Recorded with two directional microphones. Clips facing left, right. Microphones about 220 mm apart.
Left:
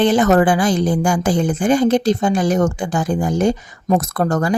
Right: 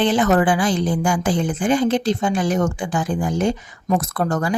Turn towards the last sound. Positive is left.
turn(degrees=40)  # may be behind; listen again after turning